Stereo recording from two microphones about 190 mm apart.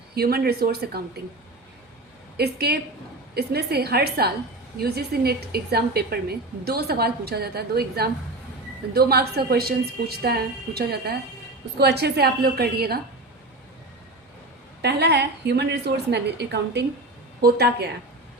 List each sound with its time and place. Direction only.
0.1 s a woman's voice: 55° right (ahead or behind)
2.4 s a woman's voice: 55° right (ahead or behind)
14.8 s a woman's voice: 60° right (ahead or behind)